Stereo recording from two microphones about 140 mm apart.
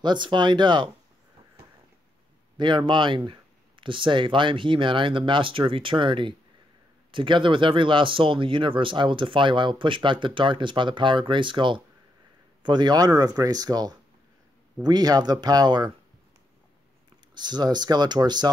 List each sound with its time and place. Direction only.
0.0 s speech: 35° right (ahead or behind)
2.5 s speech: 35° right (ahead or behind)
17.3 s speech: 30° right (ahead or behind)